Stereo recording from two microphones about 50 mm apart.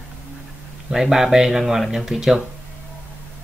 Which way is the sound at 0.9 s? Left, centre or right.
Centre.